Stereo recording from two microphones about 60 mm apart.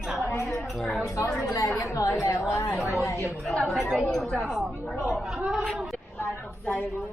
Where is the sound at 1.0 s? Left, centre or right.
Left.